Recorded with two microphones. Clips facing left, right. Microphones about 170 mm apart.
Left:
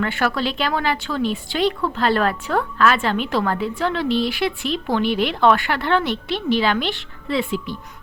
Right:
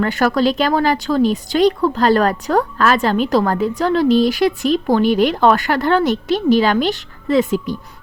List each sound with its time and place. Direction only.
0.0 s speech: 40° right (ahead or behind)